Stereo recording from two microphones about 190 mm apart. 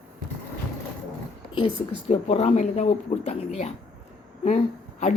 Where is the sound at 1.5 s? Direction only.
30° left (ahead or behind).